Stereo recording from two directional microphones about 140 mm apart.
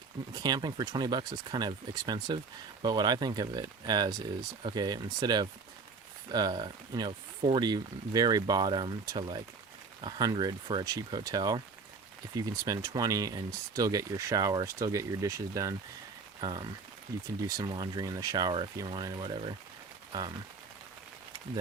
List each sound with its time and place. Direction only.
0.3 s speech: 30° right (ahead or behind)